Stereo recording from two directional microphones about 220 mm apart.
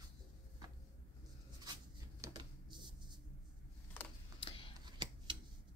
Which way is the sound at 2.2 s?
20° right (ahead or behind).